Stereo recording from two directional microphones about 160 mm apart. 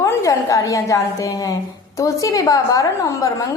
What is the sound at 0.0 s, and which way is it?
A woman's voice, 20° left (ahead or behind).